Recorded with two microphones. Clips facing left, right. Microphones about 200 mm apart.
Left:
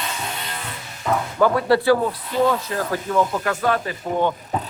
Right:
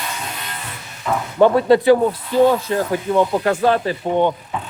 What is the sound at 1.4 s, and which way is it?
Speech, 25° right (ahead or behind).